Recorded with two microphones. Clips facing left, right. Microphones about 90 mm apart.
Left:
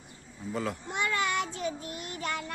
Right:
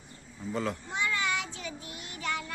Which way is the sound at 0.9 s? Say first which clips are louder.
Left 1 dB; 55° left (ahead or behind).